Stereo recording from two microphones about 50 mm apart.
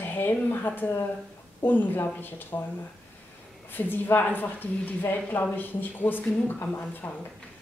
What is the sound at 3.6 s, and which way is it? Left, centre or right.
A woman's voice, left.